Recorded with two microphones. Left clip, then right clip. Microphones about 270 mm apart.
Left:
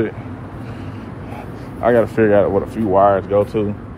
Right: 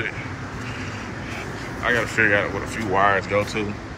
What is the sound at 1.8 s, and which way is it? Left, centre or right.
Speech, centre.